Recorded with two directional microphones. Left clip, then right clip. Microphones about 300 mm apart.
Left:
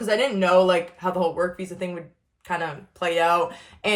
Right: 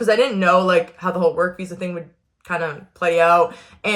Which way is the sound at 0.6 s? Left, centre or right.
Left.